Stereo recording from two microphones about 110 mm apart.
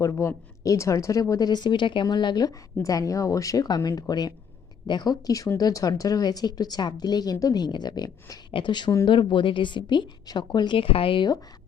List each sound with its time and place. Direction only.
0.0 s a woman's voice: 30° left (ahead or behind); by 11.3 s 55° left (ahead or behind)